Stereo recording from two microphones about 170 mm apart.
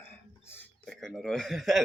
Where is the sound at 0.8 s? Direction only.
Centre (ahead or behind).